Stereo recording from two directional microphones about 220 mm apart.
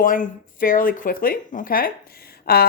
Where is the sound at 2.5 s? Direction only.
45° left (ahead or behind).